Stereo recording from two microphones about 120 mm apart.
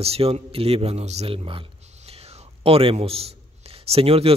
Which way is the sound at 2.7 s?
50° right (ahead or behind).